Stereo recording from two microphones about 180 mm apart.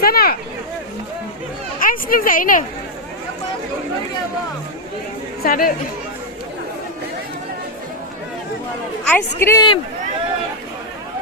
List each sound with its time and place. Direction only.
0.0 s speech: 55° left (ahead or behind)
1.8 s a woman's voice: 50° left (ahead or behind)
5.4 s speech: 55° left (ahead or behind)
9.0 s a woman's voice: 10° left (ahead or behind)